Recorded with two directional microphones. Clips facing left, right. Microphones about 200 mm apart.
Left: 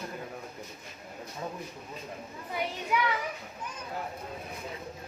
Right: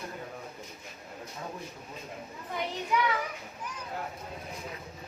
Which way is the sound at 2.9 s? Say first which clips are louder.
Right 1 dB; 5° left (ahead or behind).